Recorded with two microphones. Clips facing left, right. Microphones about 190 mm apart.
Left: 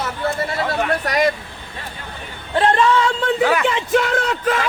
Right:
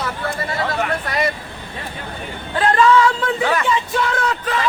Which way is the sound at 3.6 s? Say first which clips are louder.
Left 3 dB; 70° left (ahead or behind).